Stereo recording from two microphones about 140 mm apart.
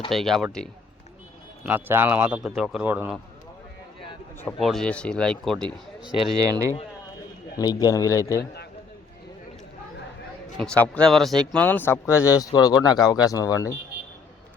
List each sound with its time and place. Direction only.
0.1 s speech: centre (ahead or behind)
1.6 s speech: 15° right (ahead or behind)
4.6 s speech: 5° left (ahead or behind)
6.3 s speech: 25° right (ahead or behind)
7.6 s speech: 25° left (ahead or behind)
10.6 s speech: 5° left (ahead or behind); by 13.7 s 25° left (ahead or behind)